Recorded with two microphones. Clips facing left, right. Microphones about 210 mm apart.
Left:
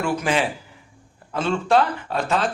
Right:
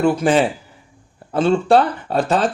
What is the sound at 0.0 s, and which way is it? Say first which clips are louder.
Speech: right 7 dB; 35° right (ahead or behind).